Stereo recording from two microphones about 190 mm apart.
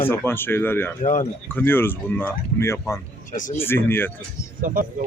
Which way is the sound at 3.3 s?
45° left (ahead or behind).